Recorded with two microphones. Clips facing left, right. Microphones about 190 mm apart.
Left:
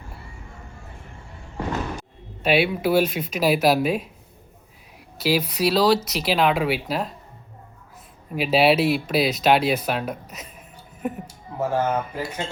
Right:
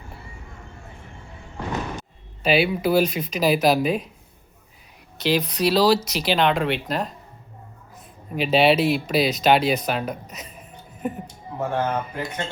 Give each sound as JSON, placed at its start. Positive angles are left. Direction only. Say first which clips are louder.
{"t": 2.0, "sound": "speech", "louder": "even", "side_deg": 0}
{"t": 5.1, "sound": "speech", "louder": "even", "side_deg": 5}
{"t": 8.4, "sound": "speech", "louder": "even", "side_deg": 5}